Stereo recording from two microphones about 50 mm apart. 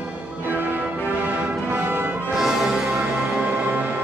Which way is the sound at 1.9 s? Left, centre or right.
Right.